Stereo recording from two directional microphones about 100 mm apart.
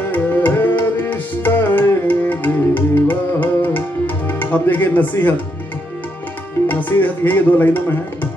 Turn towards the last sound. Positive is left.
turn(degrees=20)  # may be behind; listen again after turning